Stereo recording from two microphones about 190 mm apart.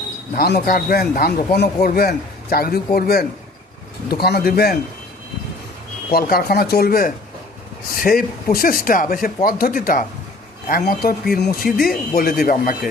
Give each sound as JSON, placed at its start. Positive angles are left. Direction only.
{"t": 0.3, "sound": "speech", "side_deg": 55}
{"t": 6.1, "sound": "speech", "side_deg": 50}